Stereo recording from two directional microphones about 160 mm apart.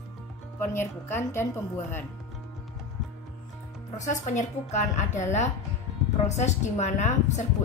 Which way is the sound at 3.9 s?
50° left (ahead or behind).